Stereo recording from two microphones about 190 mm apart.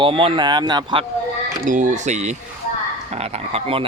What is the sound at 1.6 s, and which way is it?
Speech, 40° right (ahead or behind).